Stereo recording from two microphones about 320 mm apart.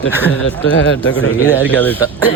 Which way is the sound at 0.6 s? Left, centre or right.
Left.